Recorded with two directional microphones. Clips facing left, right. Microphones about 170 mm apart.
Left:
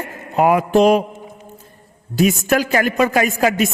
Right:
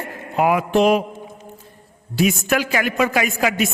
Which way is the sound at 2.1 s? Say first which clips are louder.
Left 3 dB; 40° left (ahead or behind).